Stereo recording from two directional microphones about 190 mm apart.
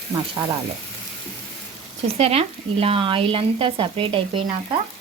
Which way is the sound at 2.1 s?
30° right (ahead or behind).